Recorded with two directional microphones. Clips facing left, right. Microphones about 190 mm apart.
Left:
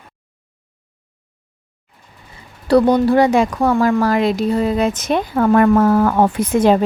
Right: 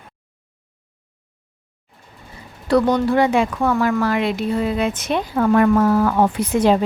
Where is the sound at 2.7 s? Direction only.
35° left (ahead or behind).